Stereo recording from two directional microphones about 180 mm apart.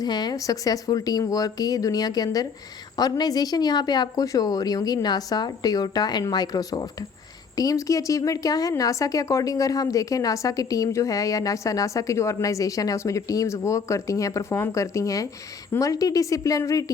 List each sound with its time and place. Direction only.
0.0 s speech: 25° left (ahead or behind)